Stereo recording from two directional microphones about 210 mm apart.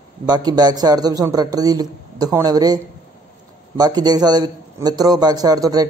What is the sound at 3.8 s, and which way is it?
A man's voice, 20° right (ahead or behind).